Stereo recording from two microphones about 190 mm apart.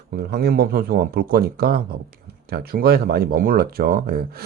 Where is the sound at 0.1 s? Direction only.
55° right (ahead or behind).